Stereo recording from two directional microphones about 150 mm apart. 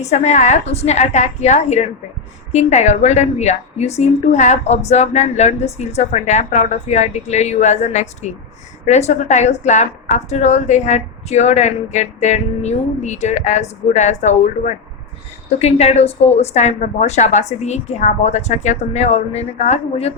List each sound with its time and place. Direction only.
0.0 s a woman's voice: 50° left (ahead or behind)
15.4 s a woman's voice: 45° left (ahead or behind)